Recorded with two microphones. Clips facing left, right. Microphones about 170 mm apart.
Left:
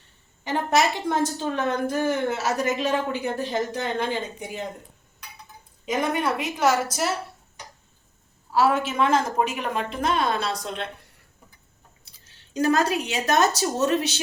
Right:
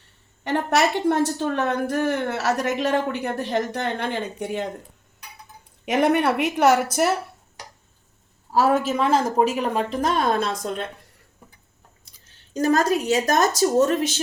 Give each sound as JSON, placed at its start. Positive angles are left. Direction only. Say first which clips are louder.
{"t": 0.4, "sound": "a woman's voice", "louder": "right 1 dB", "side_deg": -65}
{"t": 5.8, "sound": "a woman's voice", "louder": "right 5 dB", "side_deg": -70}
{"t": 8.5, "sound": "a woman's voice", "louder": "right 2 dB", "side_deg": -40}
{"t": 12.5, "sound": "speech", "louder": "right 2 dB", "side_deg": -45}